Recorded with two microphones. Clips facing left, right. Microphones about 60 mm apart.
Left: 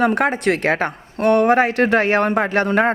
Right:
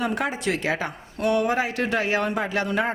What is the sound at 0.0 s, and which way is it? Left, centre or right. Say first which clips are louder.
A woman's voice: left 8 dB; left.